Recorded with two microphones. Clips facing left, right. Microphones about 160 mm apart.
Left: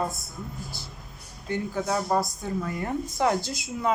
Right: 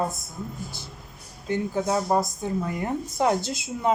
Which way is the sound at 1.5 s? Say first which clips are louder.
Right 3 dB; 15° right (ahead or behind).